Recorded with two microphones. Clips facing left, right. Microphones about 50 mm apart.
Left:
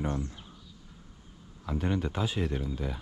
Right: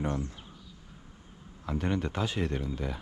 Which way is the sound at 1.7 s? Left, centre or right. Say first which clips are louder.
Even; right.